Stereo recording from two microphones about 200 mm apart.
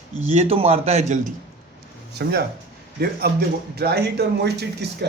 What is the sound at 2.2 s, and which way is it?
Speech, 55° right (ahead or behind).